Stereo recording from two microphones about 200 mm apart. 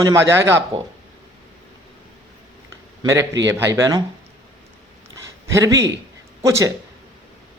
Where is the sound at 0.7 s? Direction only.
25° right (ahead or behind).